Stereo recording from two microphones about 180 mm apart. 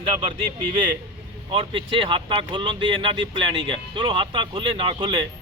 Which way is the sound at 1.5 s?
25° right (ahead or behind).